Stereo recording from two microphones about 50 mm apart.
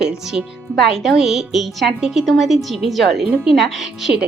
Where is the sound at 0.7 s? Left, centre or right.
Centre.